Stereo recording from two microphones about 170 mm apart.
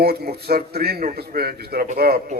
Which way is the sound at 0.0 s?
65° right (ahead or behind).